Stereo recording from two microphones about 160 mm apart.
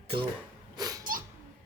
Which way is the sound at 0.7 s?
25° right (ahead or behind).